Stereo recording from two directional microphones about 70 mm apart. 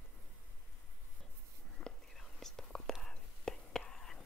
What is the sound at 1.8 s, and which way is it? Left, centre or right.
Whispering, centre.